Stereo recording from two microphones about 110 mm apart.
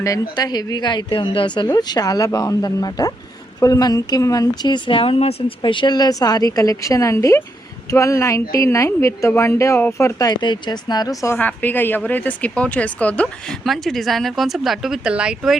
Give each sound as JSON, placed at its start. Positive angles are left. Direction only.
{"t": 0.3, "sound": "a woman's voice", "side_deg": 40}
{"t": 1.7, "sound": "a woman's voice", "side_deg": 35}
{"t": 11.3, "sound": "speech", "side_deg": 15}